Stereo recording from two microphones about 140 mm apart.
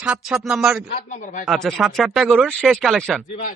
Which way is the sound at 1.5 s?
Centre (ahead or behind).